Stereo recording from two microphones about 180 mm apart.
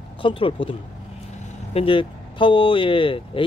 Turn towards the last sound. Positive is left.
turn(degrees=30)  # may be behind; listen again after turning